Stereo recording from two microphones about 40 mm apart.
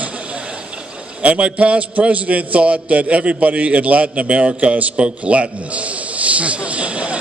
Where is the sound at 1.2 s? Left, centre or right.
Right.